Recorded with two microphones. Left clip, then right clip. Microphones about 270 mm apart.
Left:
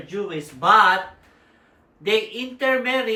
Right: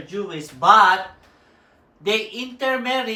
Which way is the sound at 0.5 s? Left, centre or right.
Centre.